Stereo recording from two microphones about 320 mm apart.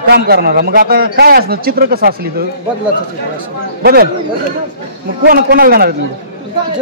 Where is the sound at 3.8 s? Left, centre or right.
Right.